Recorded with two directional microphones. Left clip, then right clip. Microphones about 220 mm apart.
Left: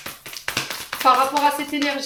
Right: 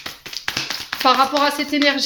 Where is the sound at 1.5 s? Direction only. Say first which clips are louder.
Right 5 dB; 45° right (ahead or behind).